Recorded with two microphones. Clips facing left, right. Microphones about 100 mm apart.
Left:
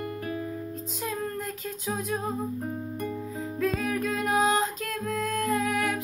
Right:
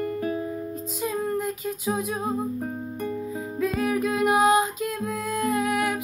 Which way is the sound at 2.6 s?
35° right (ahead or behind).